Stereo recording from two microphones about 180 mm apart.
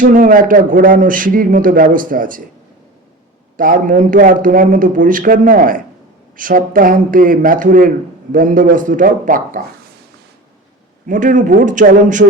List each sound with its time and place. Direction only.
0.0 s a man's voice: 50° right (ahead or behind)
3.6 s a man's voice: 50° right (ahead or behind)
11.0 s a man's voice: 45° right (ahead or behind)